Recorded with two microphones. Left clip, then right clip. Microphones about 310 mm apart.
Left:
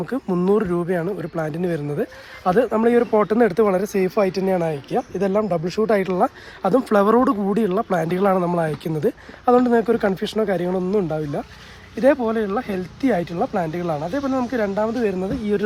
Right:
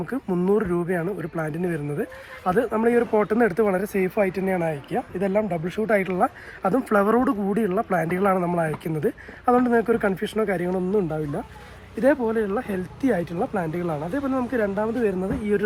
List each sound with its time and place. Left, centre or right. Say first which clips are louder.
0.0 s speech: left 3 dB; left